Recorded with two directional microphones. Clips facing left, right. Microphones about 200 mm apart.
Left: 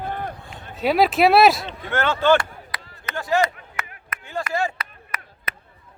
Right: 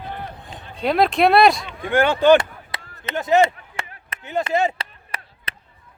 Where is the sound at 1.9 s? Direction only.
15° right (ahead or behind); by 5.5 s 30° right (ahead or behind).